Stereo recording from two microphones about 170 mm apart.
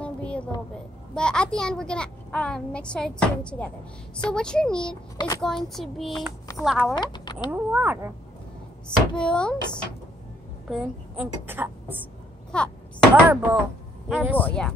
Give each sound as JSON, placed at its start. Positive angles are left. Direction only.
{"t": 0.0, "sound": "a sound", "side_deg": 5}
{"t": 1.1, "sound": "a child's voice", "side_deg": 5}
{"t": 4.8, "sound": "a child's voice", "side_deg": 25}
{"t": 5.4, "sound": "a child's voice", "side_deg": 0}
{"t": 6.9, "sound": "speech", "side_deg": 25}
{"t": 7.5, "sound": "a child's voice", "side_deg": -10}
{"t": 9.1, "sound": "a child's voice", "side_deg": 5}
{"t": 10.7, "sound": "a child's voice", "side_deg": -5}
{"t": 12.5, "sound": "a child's voice", "side_deg": 5}
{"t": 13.1, "sound": "a child's voice", "side_deg": -10}